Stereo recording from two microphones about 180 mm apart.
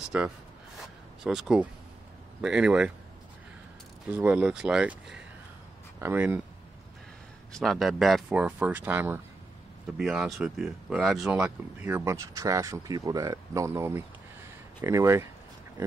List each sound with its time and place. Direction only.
0.1 s speech: 10° right (ahead or behind)
4.1 s speech: 10° right (ahead or behind)
7.5 s speech: centre (ahead or behind); by 15.2 s 15° right (ahead or behind)